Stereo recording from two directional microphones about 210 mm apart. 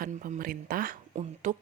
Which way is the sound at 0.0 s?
40° right (ahead or behind).